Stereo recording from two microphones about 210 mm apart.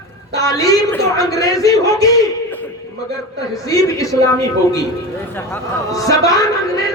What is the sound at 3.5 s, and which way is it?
A man's voice, 15° left (ahead or behind).